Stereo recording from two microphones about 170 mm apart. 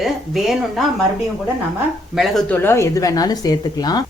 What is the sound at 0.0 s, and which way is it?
Speech, centre (ahead or behind).